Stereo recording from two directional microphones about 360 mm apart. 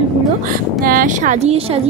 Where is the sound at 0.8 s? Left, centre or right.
Right.